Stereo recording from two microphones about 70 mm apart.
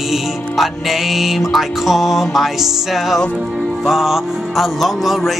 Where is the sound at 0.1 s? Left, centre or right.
Centre.